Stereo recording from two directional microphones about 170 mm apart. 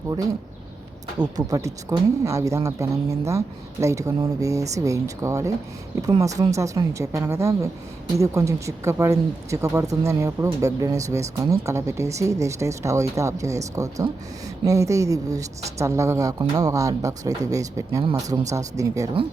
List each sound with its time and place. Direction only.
1.2 s speech: 20° right (ahead or behind)